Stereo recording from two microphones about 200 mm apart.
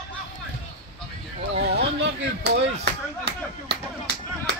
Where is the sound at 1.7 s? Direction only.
55° right (ahead or behind).